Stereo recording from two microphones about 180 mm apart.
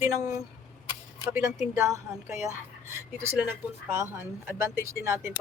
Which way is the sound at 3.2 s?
10° right (ahead or behind).